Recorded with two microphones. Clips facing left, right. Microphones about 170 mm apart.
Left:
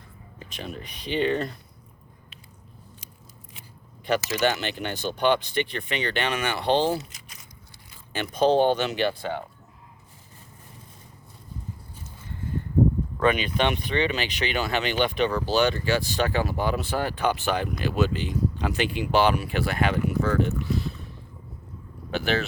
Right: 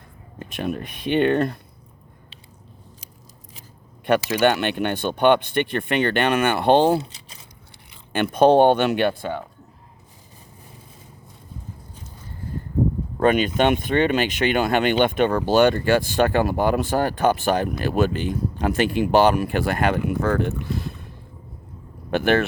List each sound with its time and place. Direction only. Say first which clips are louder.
0.3 s speech: right 9 dB; 55° right (ahead or behind)
4.0 s speech: right 5 dB; 55° right (ahead or behind)
7.1 s a sound: right 3 dB; 30° right (ahead or behind)
8.1 s speech: right 6 dB; 60° right (ahead or behind)
13.1 s speech: right 6 dB; 45° right (ahead or behind)
22.1 s speech: right 7 dB; 55° right (ahead or behind)